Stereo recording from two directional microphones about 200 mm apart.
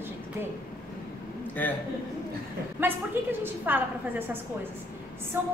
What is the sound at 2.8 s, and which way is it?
A woman's voice, 10° right (ahead or behind).